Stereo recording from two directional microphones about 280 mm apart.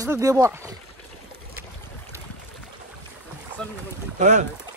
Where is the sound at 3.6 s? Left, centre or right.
Centre.